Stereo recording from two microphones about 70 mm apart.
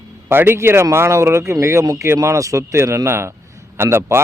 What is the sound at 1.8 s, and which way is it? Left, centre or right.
Speech, right.